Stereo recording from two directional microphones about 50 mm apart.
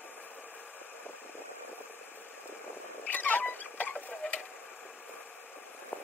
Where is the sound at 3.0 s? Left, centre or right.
Left.